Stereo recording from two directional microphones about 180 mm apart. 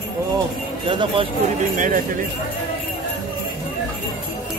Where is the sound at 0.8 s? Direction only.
30° right (ahead or behind).